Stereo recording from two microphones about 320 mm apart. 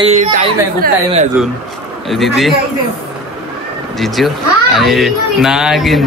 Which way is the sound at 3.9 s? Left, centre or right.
Centre.